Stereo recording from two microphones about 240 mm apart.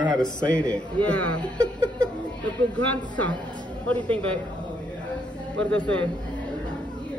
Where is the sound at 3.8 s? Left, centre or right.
Centre.